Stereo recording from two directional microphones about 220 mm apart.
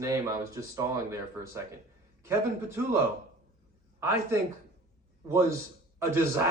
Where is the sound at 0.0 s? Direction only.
15° right (ahead or behind).